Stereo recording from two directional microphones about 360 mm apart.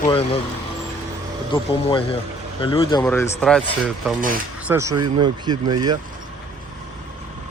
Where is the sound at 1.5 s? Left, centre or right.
Centre.